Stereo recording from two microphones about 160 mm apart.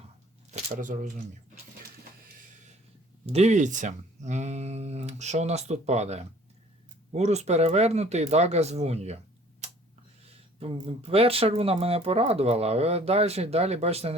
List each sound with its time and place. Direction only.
0.5 s speech: 50° right (ahead or behind)
3.2 s speech: 40° right (ahead or behind)